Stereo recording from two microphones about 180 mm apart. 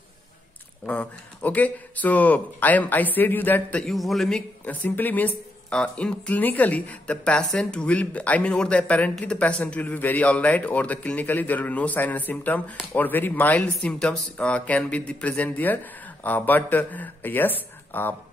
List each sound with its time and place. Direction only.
0.8 s speech: 10° left (ahead or behind)